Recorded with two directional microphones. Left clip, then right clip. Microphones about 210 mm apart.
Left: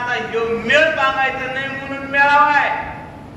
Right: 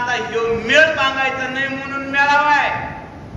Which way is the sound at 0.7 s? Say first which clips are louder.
Right 1 dB; 50° right (ahead or behind).